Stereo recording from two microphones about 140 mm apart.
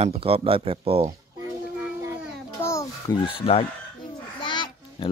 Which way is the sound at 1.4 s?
20° right (ahead or behind).